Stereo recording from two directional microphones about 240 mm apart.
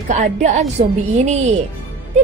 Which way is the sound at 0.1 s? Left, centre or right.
Right.